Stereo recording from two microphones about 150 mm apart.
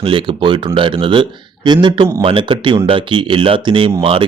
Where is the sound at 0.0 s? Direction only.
35° right (ahead or behind).